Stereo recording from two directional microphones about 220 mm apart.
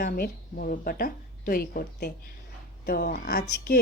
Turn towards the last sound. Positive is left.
turn(degrees=40)  # may be behind; listen again after turning